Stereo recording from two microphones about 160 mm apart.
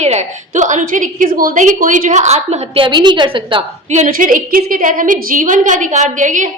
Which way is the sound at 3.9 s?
50° right (ahead or behind).